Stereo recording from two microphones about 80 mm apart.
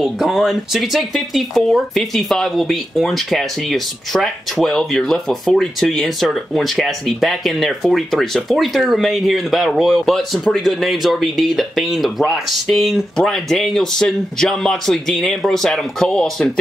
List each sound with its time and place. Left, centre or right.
0.0 s speech: centre